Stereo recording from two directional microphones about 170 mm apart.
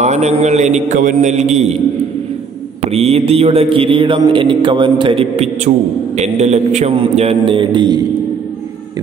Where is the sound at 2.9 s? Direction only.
35° right (ahead or behind).